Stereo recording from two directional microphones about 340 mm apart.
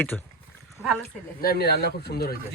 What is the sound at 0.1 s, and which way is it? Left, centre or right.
Speech, centre.